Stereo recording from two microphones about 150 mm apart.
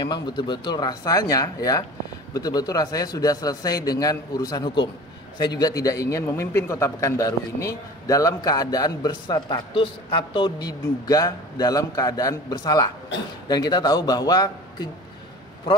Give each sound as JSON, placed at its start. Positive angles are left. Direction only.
{"t": 0.0, "sound": "a man's voice", "side_deg": 30}